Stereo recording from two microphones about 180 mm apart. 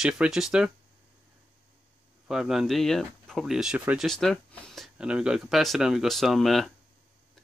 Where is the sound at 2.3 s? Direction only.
Centre (ahead or behind).